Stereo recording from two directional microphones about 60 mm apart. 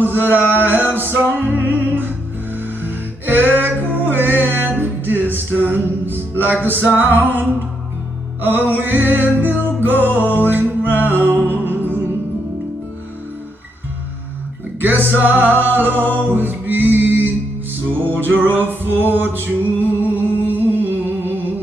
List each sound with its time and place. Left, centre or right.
0.0 s music: right
14.8 s music: right